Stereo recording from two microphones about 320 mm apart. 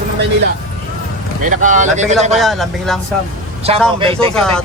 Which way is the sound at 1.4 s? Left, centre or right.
Right.